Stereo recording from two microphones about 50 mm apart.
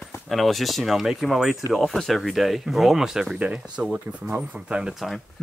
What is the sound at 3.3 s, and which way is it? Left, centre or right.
Speech, right.